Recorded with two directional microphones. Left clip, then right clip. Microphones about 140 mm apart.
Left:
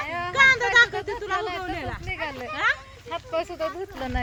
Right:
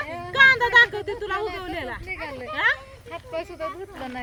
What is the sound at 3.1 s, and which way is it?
Speech, 30° left (ahead or behind).